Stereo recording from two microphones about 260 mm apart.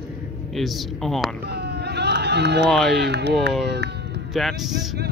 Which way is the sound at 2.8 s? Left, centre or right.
Right.